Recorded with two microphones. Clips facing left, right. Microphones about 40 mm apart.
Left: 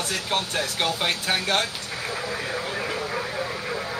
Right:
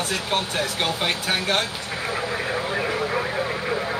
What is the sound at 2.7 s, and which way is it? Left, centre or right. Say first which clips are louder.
Vehicle: right 4 dB; right.